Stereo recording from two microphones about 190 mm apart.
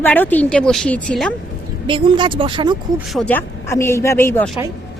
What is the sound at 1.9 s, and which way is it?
Speech, 25° right (ahead or behind).